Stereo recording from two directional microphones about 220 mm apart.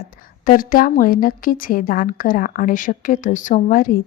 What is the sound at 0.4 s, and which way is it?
A woman's voice, 40° left (ahead or behind).